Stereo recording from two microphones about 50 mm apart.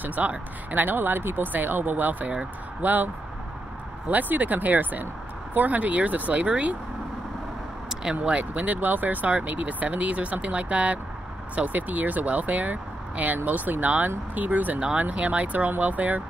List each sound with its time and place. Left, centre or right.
0.0 s speech: right
4.1 s speech: right
7.9 s speech: centre